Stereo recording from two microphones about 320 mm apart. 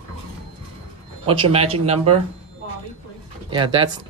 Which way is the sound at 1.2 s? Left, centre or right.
Centre.